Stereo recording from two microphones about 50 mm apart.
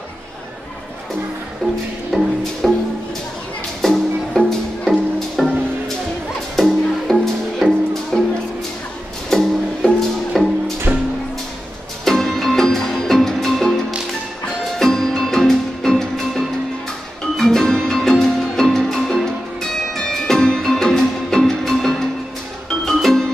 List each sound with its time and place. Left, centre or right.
2.1 s music: centre
3.8 s music: centre
6.5 s music: centre
9.3 s music: centre
10.9 s music: centre
12.0 s music: centre